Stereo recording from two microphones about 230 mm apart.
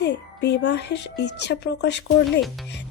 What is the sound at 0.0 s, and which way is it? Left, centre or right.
Speech, left.